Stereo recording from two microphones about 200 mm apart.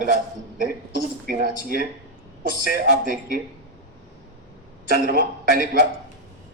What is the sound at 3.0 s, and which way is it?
Speech, 45° right (ahead or behind).